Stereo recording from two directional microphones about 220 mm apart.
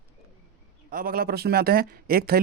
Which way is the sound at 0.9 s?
40° right (ahead or behind).